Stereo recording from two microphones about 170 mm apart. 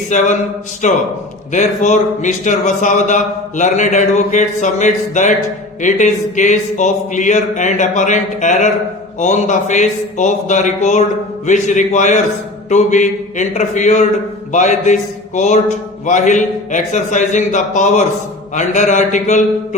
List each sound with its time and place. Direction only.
0.1 s a man's voice: 45° left (ahead or behind)